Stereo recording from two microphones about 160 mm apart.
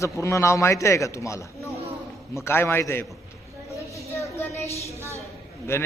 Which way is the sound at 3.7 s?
20° left (ahead or behind).